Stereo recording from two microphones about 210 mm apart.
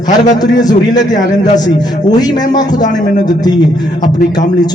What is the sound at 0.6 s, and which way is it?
A man's voice, 20° left (ahead or behind).